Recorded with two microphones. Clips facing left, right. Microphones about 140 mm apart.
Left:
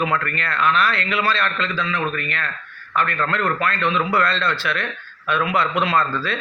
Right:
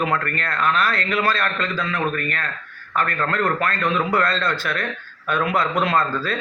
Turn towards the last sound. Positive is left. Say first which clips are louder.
# even
turn(degrees=-45)  # may be behind; listen again after turning